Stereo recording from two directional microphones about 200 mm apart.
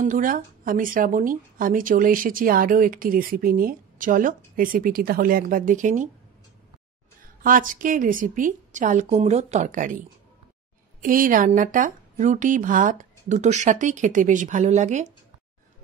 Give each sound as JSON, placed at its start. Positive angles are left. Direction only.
{"t": 0.0, "sound": "speech", "side_deg": -40}
{"t": 7.4, "sound": "speech", "side_deg": -45}